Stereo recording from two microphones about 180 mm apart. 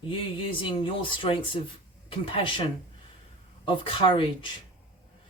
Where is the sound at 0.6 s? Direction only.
30° left (ahead or behind).